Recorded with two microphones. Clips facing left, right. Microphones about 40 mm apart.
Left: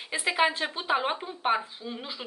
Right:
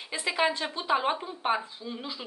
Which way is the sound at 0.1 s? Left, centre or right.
Centre.